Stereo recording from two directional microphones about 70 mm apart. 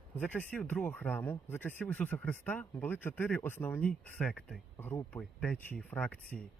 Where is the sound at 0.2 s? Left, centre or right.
Left.